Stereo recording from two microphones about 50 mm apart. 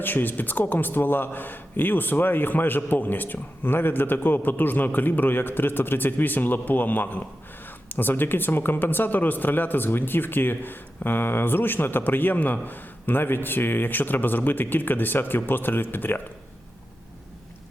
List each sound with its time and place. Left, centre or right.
0.0 s a man's voice: left